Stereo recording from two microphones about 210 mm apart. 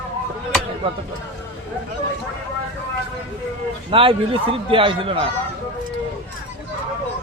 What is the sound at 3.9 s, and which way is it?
Speech, 25° right (ahead or behind).